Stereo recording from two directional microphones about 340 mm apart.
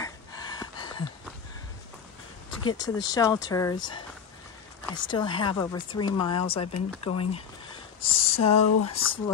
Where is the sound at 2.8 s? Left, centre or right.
Centre.